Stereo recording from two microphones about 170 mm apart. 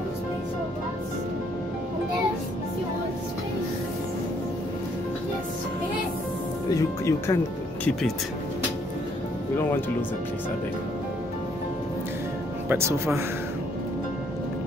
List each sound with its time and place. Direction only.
6.7 s speech: 15° left (ahead or behind)
9.6 s speech: 10° left (ahead or behind)
12.6 s speech: 15° right (ahead or behind)